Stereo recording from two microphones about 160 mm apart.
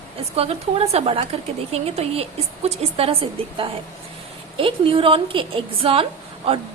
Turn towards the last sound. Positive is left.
turn(degrees=-35)  # may be behind; listen again after turning